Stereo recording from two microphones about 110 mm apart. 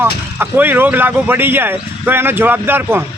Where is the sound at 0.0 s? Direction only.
20° right (ahead or behind).